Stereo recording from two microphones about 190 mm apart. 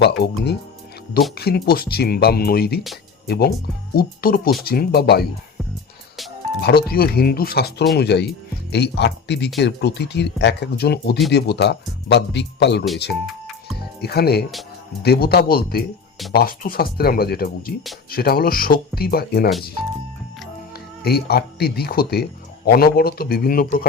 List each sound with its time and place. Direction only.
0.0 s speech: 60° left (ahead or behind)
6.6 s speech: 55° left (ahead or behind)
14.0 s speech: 55° left (ahead or behind)
21.0 s speech: 55° left (ahead or behind)